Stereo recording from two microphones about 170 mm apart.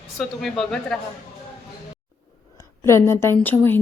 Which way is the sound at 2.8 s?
15° left (ahead or behind).